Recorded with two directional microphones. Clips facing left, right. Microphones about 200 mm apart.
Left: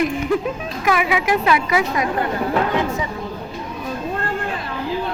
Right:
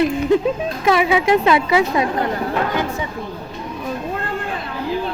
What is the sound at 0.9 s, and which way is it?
Speech, 30° right (ahead or behind).